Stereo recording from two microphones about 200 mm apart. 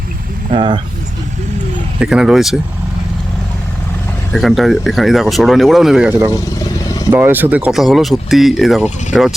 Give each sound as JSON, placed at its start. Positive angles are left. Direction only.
{"t": 0.5, "sound": "speech", "side_deg": -25}
{"t": 2.0, "sound": "speech", "side_deg": -5}
{"t": 4.3, "sound": "speech", "side_deg": 0}
{"t": 6.8, "sound": "vehicle", "side_deg": 15}
{"t": 7.1, "sound": "speech", "side_deg": -10}